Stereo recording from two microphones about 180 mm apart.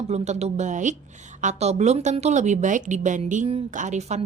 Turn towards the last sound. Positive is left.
turn(degrees=-40)  # may be behind; listen again after turning